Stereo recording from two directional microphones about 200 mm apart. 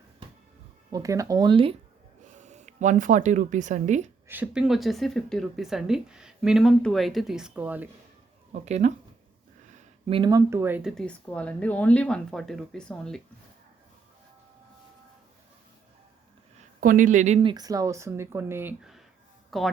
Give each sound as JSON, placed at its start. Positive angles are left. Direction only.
{"t": 0.9, "sound": "speech", "side_deg": -15}
{"t": 2.2, "sound": "speech", "side_deg": -35}
{"t": 4.3, "sound": "a woman's voice", "side_deg": -5}
{"t": 8.5, "sound": "speech", "side_deg": -35}
{"t": 10.1, "sound": "a woman's voice", "side_deg": -20}
{"t": 16.6, "sound": "speech", "side_deg": -40}
{"t": 17.5, "sound": "speech", "side_deg": -20}